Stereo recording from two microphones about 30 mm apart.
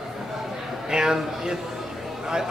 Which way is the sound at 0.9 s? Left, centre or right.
Right.